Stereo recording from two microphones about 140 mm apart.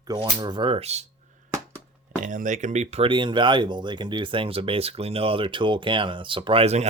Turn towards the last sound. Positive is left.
turn(degrees=-50)  # may be behind; listen again after turning